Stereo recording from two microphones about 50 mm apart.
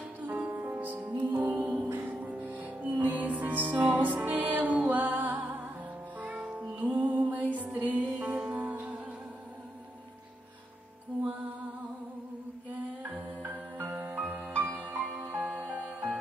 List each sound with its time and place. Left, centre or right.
0.5 s music: right
1.9 s music: right
2.2 s music: right
13.9 s music: right
14.4 s music: right